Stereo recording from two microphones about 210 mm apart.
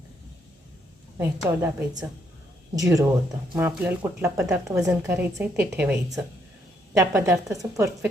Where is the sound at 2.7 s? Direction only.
15° right (ahead or behind).